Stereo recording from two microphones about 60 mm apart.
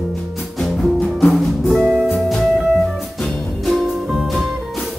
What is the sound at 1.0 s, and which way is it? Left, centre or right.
Music, left.